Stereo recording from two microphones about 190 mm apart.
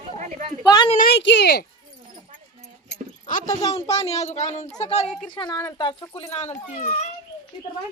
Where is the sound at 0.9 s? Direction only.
55° left (ahead or behind).